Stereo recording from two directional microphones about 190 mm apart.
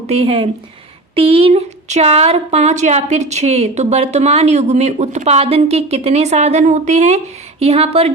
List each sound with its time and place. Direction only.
0.1 s speech: 30° right (ahead or behind)